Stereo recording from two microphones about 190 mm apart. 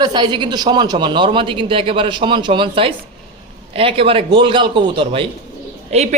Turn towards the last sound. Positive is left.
turn(degrees=-35)  # may be behind; listen again after turning